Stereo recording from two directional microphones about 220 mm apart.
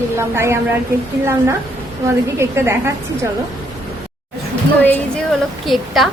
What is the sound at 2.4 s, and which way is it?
Speech, 10° right (ahead or behind).